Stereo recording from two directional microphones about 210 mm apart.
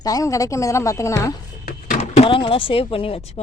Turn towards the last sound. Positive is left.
turn(degrees=25)  # may be behind; listen again after turning